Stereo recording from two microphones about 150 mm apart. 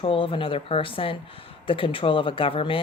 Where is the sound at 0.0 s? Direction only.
35° left (ahead or behind).